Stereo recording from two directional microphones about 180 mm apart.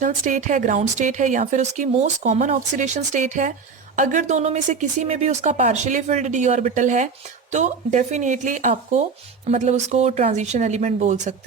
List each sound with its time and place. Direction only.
0.0 s speech: 45° right (ahead or behind)